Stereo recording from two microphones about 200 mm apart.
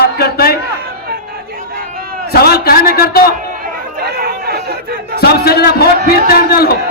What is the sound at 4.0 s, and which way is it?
Chatter, 50° right (ahead or behind).